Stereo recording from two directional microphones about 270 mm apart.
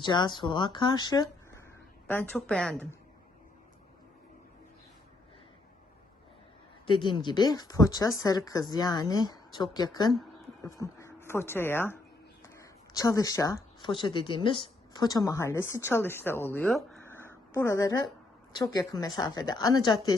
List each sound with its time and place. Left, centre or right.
0.0 s a woman's voice: centre
6.8 s speech: centre